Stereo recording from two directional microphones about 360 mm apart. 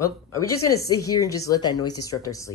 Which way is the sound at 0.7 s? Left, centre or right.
Left.